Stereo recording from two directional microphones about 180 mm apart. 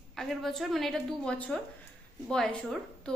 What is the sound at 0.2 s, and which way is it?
A woman's voice, centre (ahead or behind).